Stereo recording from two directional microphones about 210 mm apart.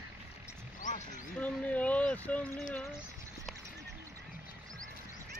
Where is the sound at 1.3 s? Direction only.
5° left (ahead or behind).